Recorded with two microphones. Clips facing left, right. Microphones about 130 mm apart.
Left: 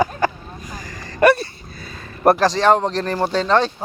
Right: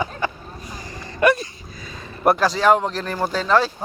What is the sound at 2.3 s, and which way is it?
Speech, 40° left (ahead or behind).